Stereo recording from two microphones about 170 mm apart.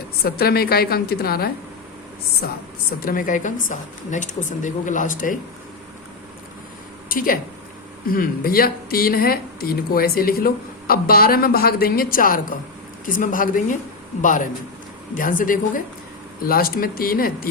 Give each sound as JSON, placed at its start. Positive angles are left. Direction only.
{"t": 0.3, "sound": "speech", "side_deg": 65}
{"t": 3.0, "sound": "a woman's voice", "side_deg": 55}
{"t": 7.1, "sound": "a woman's voice", "side_deg": 55}